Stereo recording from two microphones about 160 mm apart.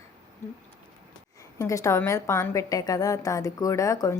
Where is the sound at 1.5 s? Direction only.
20° left (ahead or behind).